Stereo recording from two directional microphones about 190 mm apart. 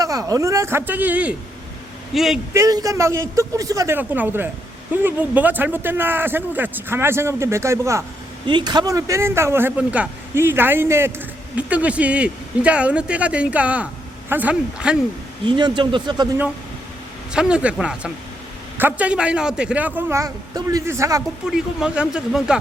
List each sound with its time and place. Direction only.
0.0 s speech: 20° right (ahead or behind); by 2.4 s centre (ahead or behind)
2.5 s speech: 15° right (ahead or behind)
15.4 s speech: 25° right (ahead or behind)
17.3 s speech: 5° right (ahead or behind)
21.5 s speech: 5° right (ahead or behind)